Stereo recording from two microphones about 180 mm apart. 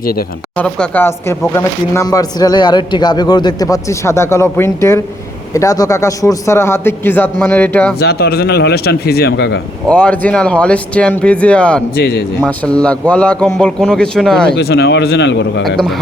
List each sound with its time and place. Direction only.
0.0 s speech: 55° left (ahead or behind)
0.5 s speech: 10° left (ahead or behind)
7.9 s speech: 60° left (ahead or behind)
9.8 s speech: 5° left (ahead or behind)
14.5 s speech: 65° left (ahead or behind); by 15.6 s 80° left
15.6 s speech: centre (ahead or behind)